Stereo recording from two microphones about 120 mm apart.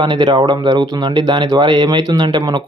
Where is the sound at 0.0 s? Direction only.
40° right (ahead or behind).